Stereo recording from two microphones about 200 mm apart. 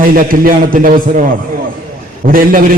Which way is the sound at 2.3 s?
45° right (ahead or behind).